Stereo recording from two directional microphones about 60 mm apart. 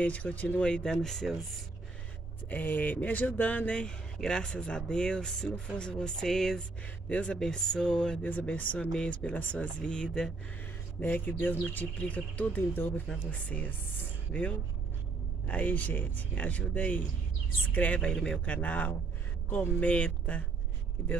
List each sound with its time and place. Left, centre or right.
0.0 s speech: left; by 1.6 s centre
2.5 s speech: left
3.7 s speech: centre
7.1 s speech: left
7.3 s speech: centre
8.2 s speech: left
8.7 s speech: centre
11.0 s speech: left
13.0 s speech: centre